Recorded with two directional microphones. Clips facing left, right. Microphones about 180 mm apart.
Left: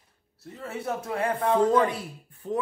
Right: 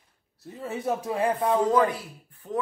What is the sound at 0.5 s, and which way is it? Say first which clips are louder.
Speech: right 3 dB; 15° right (ahead or behind).